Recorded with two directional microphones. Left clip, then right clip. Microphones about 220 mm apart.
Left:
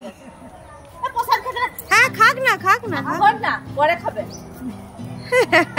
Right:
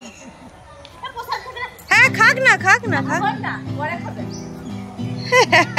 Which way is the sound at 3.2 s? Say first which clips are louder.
Left 6 dB; 40° left (ahead or behind).